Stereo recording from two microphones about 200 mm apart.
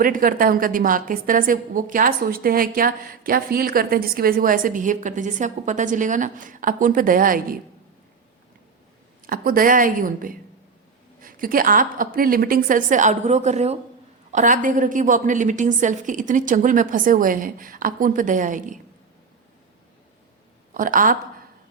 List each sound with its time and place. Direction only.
0.0 s a woman's voice: 45° right (ahead or behind)
9.2 s a woman's voice: 45° right (ahead or behind)
20.7 s a woman's voice: 40° right (ahead or behind)